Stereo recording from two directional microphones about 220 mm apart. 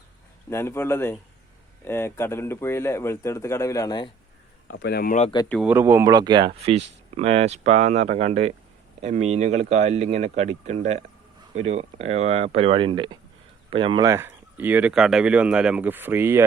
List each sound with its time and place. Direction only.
0.5 s speech: 10° left (ahead or behind)
4.7 s speech: 50° left (ahead or behind)
5.5 s speech: 5° right (ahead or behind)